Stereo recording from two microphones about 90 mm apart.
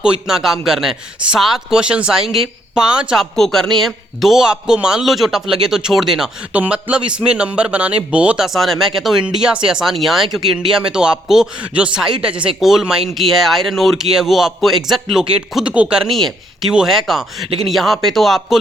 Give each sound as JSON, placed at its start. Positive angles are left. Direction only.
{"t": 0.0, "sound": "a man's voice", "side_deg": -5}
{"t": 3.3, "sound": "a man's voice", "side_deg": 5}
{"t": 6.5, "sound": "a man's voice", "side_deg": -15}
{"t": 16.1, "sound": "a man's voice", "side_deg": 5}